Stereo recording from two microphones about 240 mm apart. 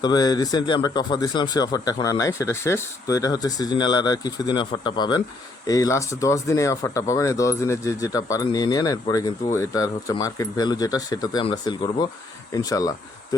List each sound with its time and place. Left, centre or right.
0.0 s speech: centre